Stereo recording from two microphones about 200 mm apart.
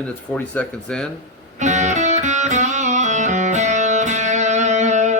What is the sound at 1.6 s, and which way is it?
Music, 35° right (ahead or behind).